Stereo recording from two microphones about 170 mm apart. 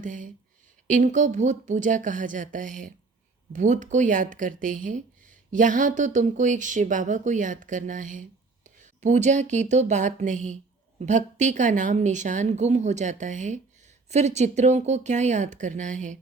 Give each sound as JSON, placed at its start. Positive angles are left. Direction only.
{"t": 0.0, "sound": "speech", "side_deg": -50}